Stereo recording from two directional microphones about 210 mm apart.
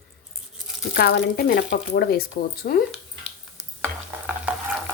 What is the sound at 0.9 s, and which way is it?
Speech, 50° left (ahead or behind).